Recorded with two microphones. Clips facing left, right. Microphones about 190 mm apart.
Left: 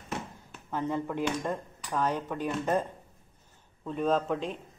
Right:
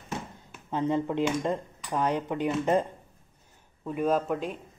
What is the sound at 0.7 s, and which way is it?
A man's voice, 20° right (ahead or behind).